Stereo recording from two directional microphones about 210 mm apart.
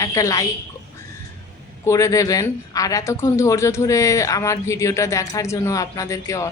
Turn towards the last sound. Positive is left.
turn(degrees=15)  # may be behind; listen again after turning